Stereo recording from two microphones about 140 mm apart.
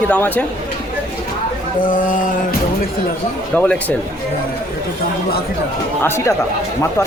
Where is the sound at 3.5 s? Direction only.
10° left (ahead or behind).